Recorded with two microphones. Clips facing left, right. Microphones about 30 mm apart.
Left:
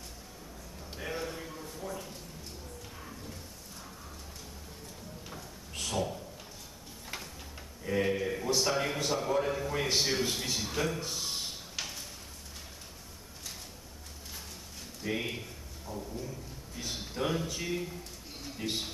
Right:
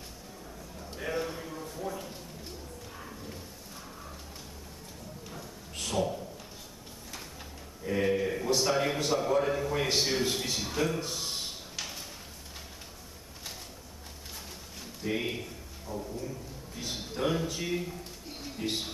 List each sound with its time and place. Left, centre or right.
0.9 s a sound: centre
5.3 s drawer open or close: centre
5.9 s speech: centre
7.8 s a man's voice: centre
15.0 s a man's voice: centre